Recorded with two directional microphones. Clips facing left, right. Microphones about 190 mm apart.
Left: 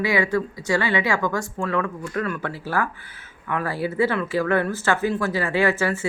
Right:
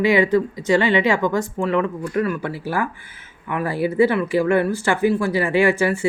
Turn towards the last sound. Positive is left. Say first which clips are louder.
# right 4 dB
turn(degrees=-15)  # may be behind; listen again after turning